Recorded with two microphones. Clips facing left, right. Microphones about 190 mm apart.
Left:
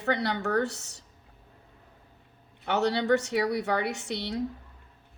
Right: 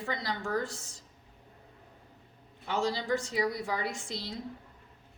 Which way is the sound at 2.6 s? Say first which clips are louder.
Left 5 dB; 70° left (ahead or behind).